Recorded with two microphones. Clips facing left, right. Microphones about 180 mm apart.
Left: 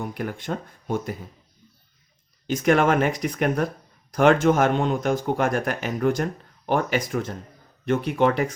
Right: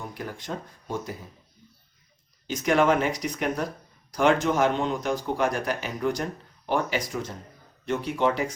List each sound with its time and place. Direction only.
0.1 s speech: 60° left (ahead or behind)
2.5 s speech: 55° left (ahead or behind)